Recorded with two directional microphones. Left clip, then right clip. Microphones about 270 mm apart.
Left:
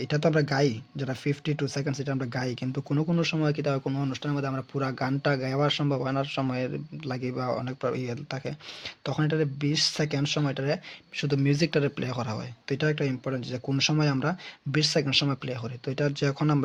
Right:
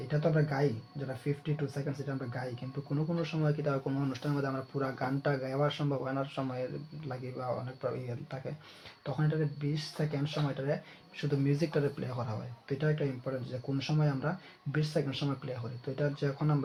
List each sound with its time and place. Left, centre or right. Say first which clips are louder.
0.1 s speech: left 6 dB; left